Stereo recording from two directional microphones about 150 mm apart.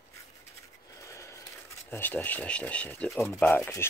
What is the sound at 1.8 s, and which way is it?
Speech, 15° left (ahead or behind).